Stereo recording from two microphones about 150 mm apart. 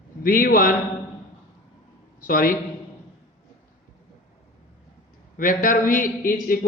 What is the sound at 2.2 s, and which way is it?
Speech, 70° left (ahead or behind).